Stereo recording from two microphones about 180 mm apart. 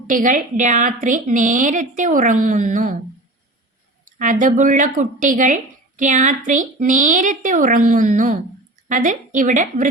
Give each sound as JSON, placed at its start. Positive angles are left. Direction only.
{"t": 0.1, "sound": "a woman's voice", "side_deg": -45}
{"t": 4.0, "sound": "a woman's voice", "side_deg": -45}